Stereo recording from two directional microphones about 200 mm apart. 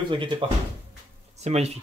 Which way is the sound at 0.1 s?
25° right (ahead or behind).